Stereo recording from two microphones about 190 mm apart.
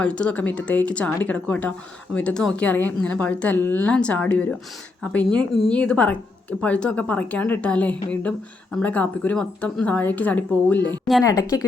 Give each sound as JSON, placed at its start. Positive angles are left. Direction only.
{"t": 0.0, "sound": "a woman's voice", "side_deg": 5}